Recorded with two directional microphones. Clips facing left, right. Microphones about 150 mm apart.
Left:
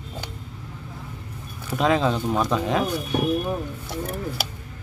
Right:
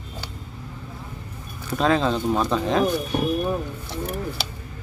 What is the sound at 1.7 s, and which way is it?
Speech, 10° left (ahead or behind).